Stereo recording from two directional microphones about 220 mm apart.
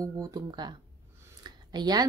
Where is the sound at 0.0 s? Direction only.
15° right (ahead or behind).